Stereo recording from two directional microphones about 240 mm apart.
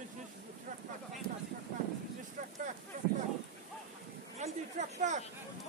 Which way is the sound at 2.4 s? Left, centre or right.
Right.